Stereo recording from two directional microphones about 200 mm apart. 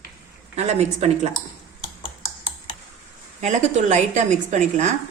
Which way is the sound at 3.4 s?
35° right (ahead or behind).